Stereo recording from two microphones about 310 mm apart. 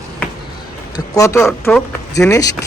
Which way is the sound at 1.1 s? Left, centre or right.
Centre.